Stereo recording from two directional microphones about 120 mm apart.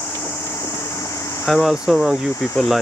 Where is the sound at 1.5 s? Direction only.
5° left (ahead or behind).